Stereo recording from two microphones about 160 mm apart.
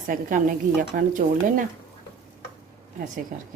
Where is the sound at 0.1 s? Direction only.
55° right (ahead or behind).